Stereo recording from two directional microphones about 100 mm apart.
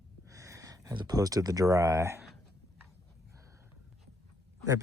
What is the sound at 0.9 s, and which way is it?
Speech, 45° right (ahead or behind).